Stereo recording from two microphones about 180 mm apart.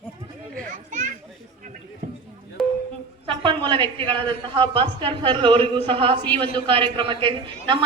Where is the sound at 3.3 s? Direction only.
30° right (ahead or behind).